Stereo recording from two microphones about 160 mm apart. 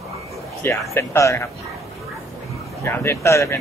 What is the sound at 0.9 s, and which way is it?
Speech, 15° left (ahead or behind).